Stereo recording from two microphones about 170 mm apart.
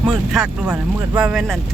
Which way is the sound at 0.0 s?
5° right (ahead or behind).